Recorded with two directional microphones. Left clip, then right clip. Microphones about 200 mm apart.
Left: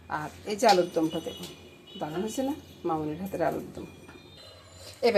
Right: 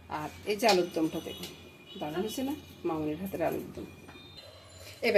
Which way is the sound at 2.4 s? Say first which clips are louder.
Left 4 dB; 5° left (ahead or behind).